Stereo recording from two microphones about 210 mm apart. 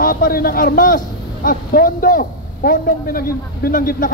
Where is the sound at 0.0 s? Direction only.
45° left (ahead or behind).